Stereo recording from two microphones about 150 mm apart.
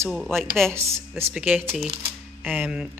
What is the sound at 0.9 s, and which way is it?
Speech, 15° right (ahead or behind).